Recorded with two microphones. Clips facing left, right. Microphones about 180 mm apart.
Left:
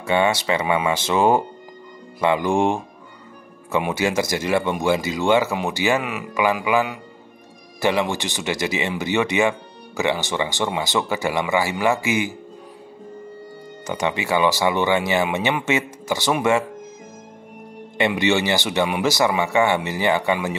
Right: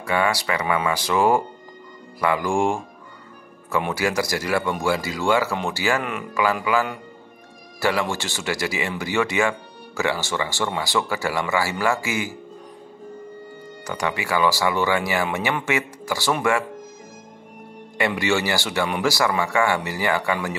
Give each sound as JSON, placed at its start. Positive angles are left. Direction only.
{"t": 0.0, "sound": "speech", "side_deg": 25}
{"t": 3.9, "sound": "a man's voice", "side_deg": 20}
{"t": 13.8, "sound": "speech", "side_deg": 20}
{"t": 17.9, "sound": "speech", "side_deg": 20}